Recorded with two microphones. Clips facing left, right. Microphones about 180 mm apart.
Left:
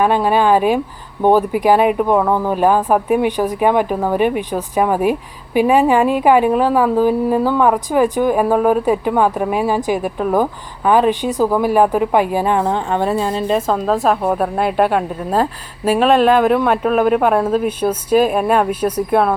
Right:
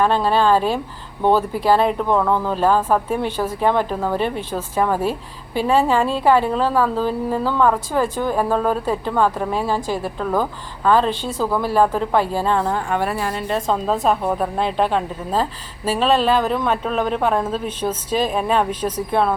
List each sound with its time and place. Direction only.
0.0 s a woman's voice: 15° left (ahead or behind)
13.7 s a woman's voice: centre (ahead or behind)
16.0 s speech: 50° left (ahead or behind)
16.6 s a woman's voice: 10° left (ahead or behind)